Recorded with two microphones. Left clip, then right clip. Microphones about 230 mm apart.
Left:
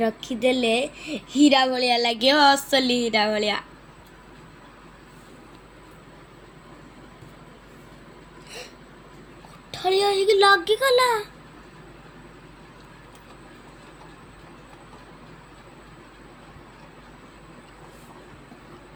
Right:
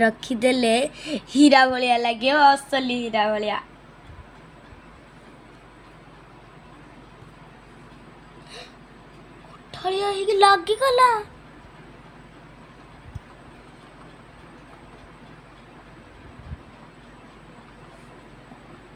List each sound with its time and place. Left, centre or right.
0.0 s a woman's voice: right; by 3.6 s centre
9.7 s a woman's voice: centre